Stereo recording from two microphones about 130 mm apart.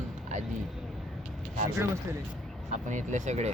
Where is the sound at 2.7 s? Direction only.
70° right (ahead or behind).